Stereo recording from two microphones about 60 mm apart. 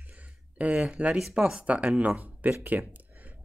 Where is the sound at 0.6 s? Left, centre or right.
Right.